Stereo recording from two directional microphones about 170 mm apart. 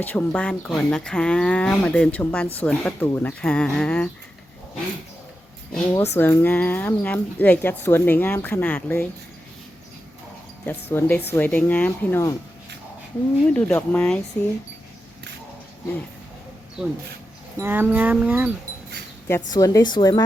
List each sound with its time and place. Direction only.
0.0 s speech: 10° left (ahead or behind)
5.9 s speech: 15° left (ahead or behind)
10.7 s speech: 10° left (ahead or behind)
13.5 s speech: 10° left (ahead or behind)
16.8 s speech: 5° right (ahead or behind)
17.6 s a sound: 10° right (ahead or behind)
19.3 s speech: 20° left (ahead or behind)